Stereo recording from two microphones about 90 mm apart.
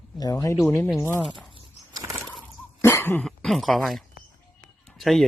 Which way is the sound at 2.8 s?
25° left (ahead or behind).